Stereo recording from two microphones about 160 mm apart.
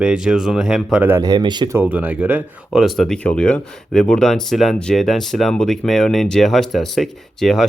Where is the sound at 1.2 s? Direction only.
25° right (ahead or behind).